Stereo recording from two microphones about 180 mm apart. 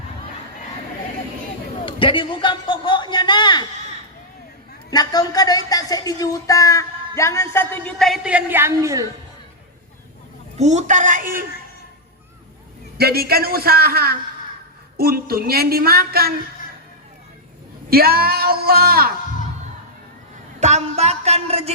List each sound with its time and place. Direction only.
1.8 s a sound: 30° left (ahead or behind)
4.9 s a man's voice: 20° left (ahead or behind); by 9.0 s 15° right (ahead or behind)
10.6 s speech: 40° right (ahead or behind)
13.0 s speech: 60° right (ahead or behind)
17.9 s speech: 55° right (ahead or behind)
20.6 s a sound: 40° right (ahead or behind)